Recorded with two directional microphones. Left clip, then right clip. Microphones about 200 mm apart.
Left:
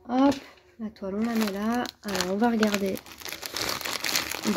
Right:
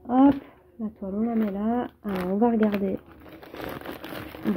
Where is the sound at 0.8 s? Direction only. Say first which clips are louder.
Right 1 dB; centre (ahead or behind).